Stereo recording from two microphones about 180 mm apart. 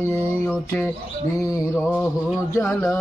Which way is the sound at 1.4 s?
20° left (ahead or behind).